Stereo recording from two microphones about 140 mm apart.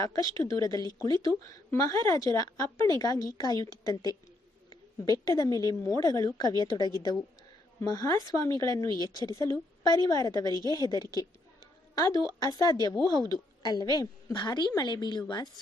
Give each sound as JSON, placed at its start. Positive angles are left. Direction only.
{"t": 0.0, "sound": "a woman's voice", "side_deg": 25}